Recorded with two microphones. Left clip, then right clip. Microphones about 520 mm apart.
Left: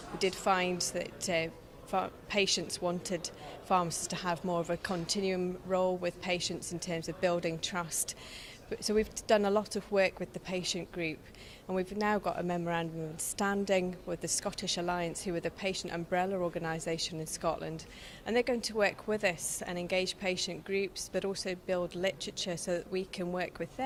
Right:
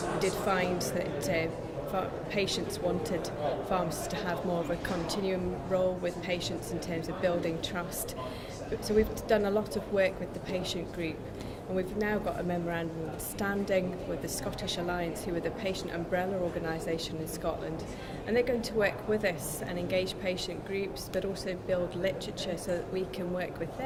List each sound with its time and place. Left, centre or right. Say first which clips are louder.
0.2 s a woman's voice: left 1 dB; left